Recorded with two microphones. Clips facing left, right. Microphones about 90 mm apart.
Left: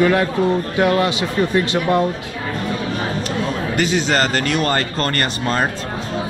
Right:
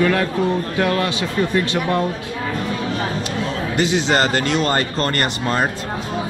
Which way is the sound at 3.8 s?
20° right (ahead or behind).